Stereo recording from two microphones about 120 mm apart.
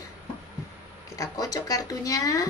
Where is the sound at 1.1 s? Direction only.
30° left (ahead or behind).